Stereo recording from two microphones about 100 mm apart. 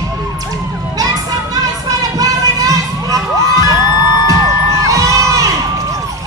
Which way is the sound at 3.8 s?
40° left (ahead or behind).